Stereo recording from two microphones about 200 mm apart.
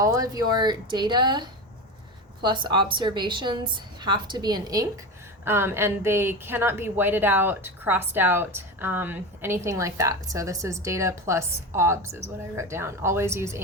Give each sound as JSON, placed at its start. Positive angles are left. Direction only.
{"t": 0.0, "sound": "a woman's voice", "side_deg": -15}